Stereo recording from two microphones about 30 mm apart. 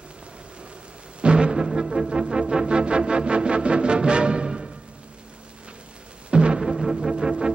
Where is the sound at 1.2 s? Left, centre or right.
Right.